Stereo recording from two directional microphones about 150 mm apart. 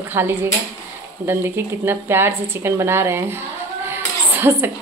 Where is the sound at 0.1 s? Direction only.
15° right (ahead or behind).